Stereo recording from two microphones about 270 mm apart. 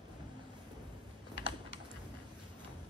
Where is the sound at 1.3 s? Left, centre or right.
Right.